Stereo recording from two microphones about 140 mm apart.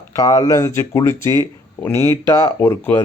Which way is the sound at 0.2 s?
25° left (ahead or behind).